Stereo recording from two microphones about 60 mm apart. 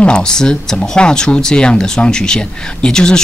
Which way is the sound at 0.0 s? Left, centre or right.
Centre.